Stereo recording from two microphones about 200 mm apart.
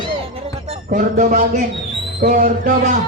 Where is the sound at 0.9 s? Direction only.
40° right (ahead or behind).